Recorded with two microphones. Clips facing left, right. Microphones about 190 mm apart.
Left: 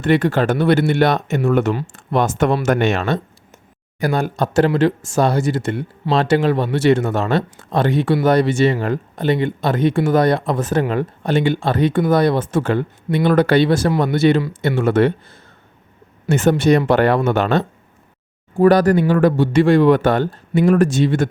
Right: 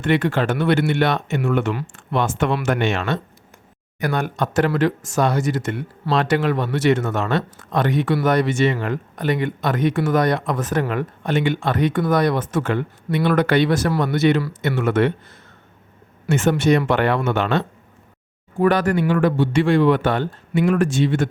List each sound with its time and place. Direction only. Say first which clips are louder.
0.0 s speech: left 3 dB; 40° left (ahead or behind)
16.3 s speech: left 3 dB; 35° left (ahead or behind)